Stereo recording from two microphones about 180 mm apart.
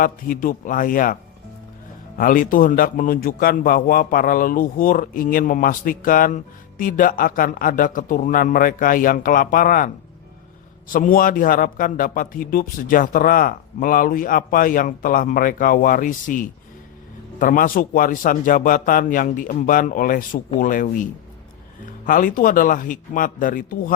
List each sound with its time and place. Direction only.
0.0 s a man's voice: 50° left (ahead or behind)